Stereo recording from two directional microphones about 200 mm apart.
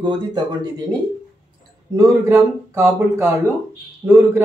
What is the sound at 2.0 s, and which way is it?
A man's voice, 15° right (ahead or behind).